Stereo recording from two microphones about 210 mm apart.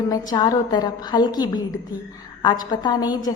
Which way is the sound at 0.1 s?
20° left (ahead or behind).